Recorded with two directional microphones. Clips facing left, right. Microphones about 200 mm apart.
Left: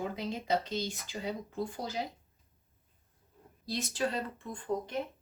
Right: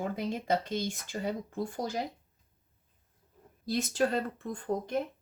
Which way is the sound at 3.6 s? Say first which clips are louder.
Right 5 dB; 50° right (ahead or behind).